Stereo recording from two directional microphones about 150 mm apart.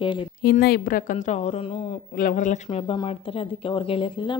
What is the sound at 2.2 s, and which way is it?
Speech, 65° left (ahead or behind).